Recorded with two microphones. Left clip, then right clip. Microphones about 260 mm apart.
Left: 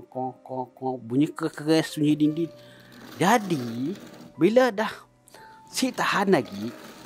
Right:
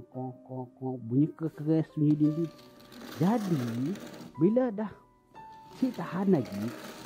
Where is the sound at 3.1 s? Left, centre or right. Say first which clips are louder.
Left 9 dB; centre.